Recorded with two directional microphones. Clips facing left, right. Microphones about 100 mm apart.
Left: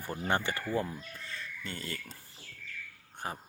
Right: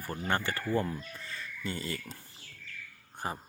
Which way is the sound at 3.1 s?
5° right (ahead or behind).